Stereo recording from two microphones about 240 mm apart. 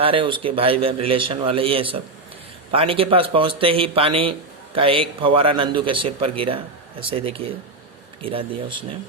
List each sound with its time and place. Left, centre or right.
0.0 s a man's voice: right